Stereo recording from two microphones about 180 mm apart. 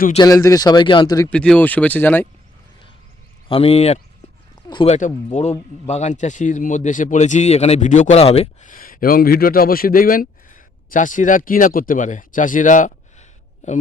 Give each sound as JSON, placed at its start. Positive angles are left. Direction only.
{"t": 0.2, "sound": "speech", "side_deg": 20}
{"t": 1.3, "sound": "speech", "side_deg": 5}
{"t": 3.5, "sound": "speech", "side_deg": 35}
{"t": 4.9, "sound": "speech", "side_deg": 40}
{"t": 8.6, "sound": "speech", "side_deg": 50}